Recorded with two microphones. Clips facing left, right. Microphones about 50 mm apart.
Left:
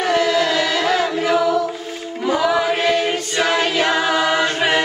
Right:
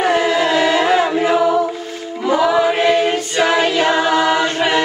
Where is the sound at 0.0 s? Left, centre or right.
Right.